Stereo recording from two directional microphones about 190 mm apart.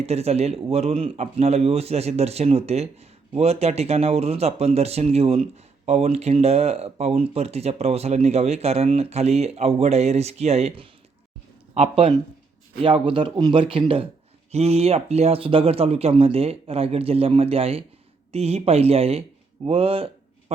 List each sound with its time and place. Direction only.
0.0 s speech: 35° right (ahead or behind)